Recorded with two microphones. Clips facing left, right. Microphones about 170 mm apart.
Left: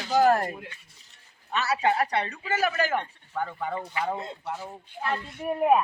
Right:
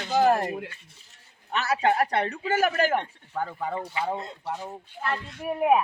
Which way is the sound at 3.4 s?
30° right (ahead or behind).